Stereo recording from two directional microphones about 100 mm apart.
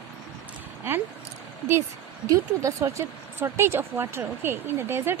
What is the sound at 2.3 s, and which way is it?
Speech, 30° right (ahead or behind).